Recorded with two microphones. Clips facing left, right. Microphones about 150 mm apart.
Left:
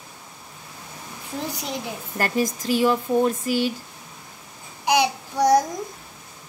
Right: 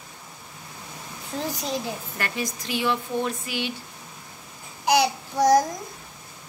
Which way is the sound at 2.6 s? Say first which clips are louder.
Left 5 dB; 40° left (ahead or behind).